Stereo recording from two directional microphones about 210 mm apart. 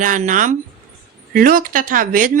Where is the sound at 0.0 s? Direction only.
40° right (ahead or behind).